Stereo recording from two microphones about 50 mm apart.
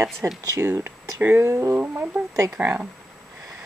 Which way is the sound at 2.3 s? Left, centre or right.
Right.